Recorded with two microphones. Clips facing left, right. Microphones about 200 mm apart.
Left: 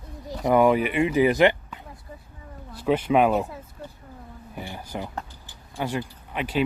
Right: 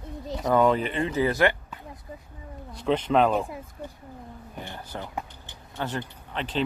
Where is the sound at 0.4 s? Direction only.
15° left (ahead or behind).